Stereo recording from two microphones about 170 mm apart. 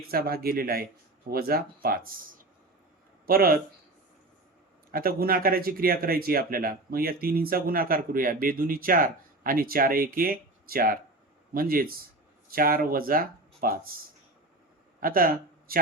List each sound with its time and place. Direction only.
0.1 s speech: 60° right (ahead or behind)
3.2 s speech: 60° right (ahead or behind)
4.9 s speech: 60° right (ahead or behind)
15.0 s a man's voice: 55° right (ahead or behind)